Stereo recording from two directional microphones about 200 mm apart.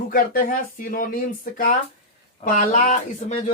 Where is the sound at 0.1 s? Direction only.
45° left (ahead or behind).